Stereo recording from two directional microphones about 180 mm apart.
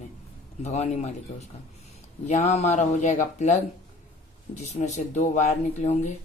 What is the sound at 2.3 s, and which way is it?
Speech, 35° left (ahead or behind).